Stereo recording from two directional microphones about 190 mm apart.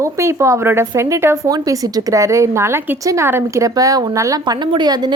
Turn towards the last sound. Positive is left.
turn(degrees=-20)  # may be behind; listen again after turning